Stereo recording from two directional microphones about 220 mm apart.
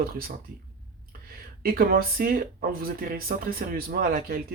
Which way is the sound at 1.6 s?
40° right (ahead or behind).